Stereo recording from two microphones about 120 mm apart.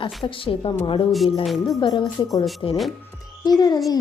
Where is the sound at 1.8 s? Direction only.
35° left (ahead or behind).